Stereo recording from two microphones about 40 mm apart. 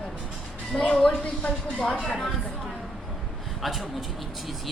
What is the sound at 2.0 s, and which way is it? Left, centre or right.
Speech, centre.